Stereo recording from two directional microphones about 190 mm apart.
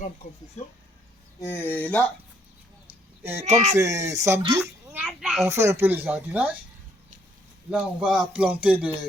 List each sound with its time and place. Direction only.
1.4 s speech: 10° left (ahead or behind)
3.4 s speech: 35° right (ahead or behind)
3.8 s a child's voice: 15° right (ahead or behind)
5.5 s speech: 15° right (ahead or behind)
7.7 s speech: 5° right (ahead or behind)